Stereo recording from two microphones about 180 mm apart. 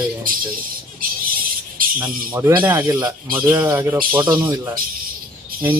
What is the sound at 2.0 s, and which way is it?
Speech, 10° right (ahead or behind).